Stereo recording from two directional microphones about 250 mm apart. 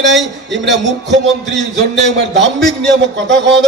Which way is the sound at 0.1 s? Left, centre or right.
Centre.